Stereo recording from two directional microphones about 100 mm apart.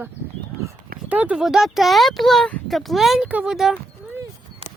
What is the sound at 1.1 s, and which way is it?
Speech, 15° right (ahead or behind).